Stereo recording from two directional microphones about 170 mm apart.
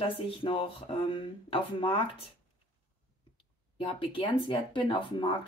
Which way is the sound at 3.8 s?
30° left (ahead or behind).